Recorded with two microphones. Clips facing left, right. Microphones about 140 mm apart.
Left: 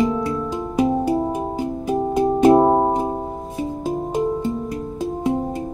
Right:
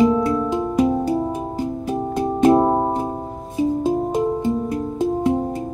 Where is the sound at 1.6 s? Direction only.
Centre (ahead or behind).